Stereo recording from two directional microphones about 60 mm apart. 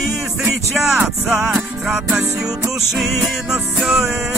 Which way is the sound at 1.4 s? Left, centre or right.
Centre.